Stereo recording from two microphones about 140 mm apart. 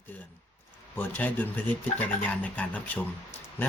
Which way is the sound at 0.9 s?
10° left (ahead or behind).